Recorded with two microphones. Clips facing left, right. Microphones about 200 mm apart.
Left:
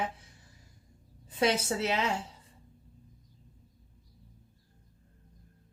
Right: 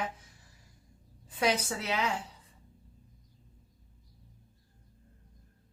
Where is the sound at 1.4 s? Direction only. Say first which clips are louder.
Left 2 dB; 25° left (ahead or behind).